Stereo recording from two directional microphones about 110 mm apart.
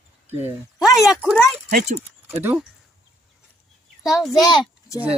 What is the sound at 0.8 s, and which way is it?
Speech, centre (ahead or behind).